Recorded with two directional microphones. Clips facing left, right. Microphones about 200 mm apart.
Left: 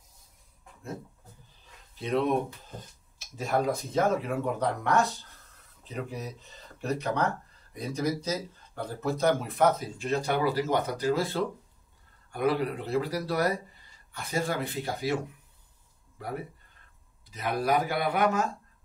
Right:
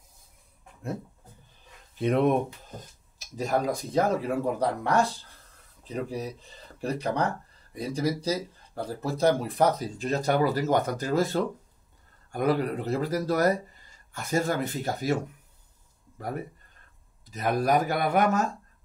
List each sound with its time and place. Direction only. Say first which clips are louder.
2.0 s speech: right 4 dB; 55° right (ahead or behind)
3.3 s speech: right 1 dB; 40° right (ahead or behind)
16.2 s speech: right 2 dB; 45° right (ahead or behind)